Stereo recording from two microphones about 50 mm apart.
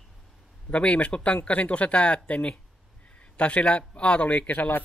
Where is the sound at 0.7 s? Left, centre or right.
Left.